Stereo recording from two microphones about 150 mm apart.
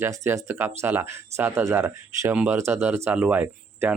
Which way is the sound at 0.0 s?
20° right (ahead or behind).